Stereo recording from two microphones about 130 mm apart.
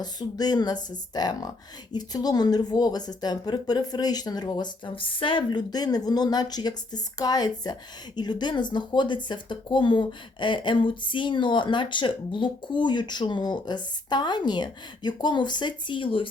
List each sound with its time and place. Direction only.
0.0 s speech: 30° left (ahead or behind)